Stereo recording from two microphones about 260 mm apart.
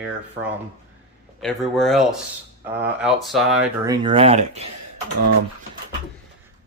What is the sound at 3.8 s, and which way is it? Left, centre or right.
Speech, centre.